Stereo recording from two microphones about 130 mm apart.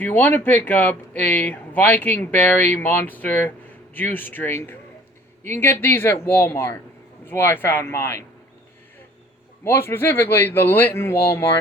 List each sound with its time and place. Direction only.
0.0 s speech: 15° left (ahead or behind)
9.6 s speech: 20° left (ahead or behind)